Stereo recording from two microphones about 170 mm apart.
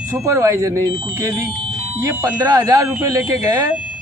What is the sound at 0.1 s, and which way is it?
Speech, 20° right (ahead or behind).